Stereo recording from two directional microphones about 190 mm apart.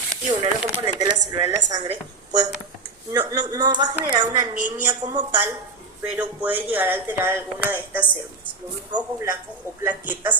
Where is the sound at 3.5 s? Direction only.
20° right (ahead or behind).